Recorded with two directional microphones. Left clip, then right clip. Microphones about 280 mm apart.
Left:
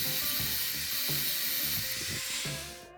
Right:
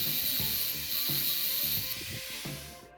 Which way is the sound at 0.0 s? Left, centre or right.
Centre.